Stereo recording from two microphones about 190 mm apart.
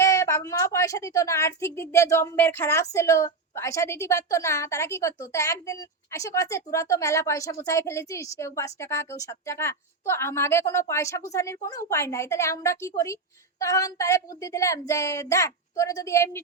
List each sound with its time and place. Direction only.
0.0 s a woman's voice: 15° left (ahead or behind)